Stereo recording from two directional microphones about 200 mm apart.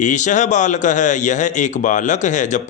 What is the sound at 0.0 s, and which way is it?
A man's voice, 40° left (ahead or behind).